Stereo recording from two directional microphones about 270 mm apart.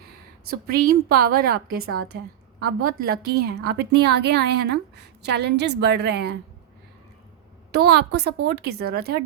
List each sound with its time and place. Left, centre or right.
0.7 s a woman's voice: right
7.7 s a woman's voice: right